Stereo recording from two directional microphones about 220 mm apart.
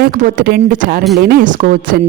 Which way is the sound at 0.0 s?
35° right (ahead or behind).